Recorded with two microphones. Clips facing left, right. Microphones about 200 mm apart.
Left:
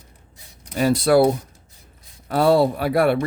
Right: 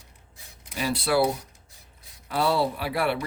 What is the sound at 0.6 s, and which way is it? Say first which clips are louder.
Speech: left 9 dB; 45° left (ahead or behind).